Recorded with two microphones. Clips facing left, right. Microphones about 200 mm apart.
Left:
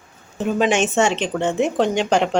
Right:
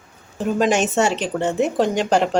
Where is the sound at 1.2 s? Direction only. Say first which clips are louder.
Even; 5° right (ahead or behind).